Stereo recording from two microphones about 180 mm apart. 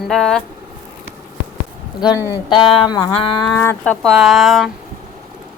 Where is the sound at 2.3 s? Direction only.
25° left (ahead or behind).